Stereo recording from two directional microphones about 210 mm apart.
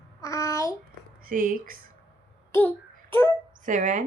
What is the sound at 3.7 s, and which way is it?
Speech, 40° right (ahead or behind).